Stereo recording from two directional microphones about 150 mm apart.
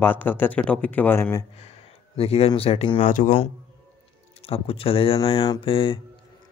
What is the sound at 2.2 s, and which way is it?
Speech, 40° left (ahead or behind).